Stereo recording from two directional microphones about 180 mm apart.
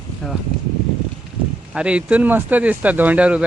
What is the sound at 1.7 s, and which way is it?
Speech, 5° right (ahead or behind).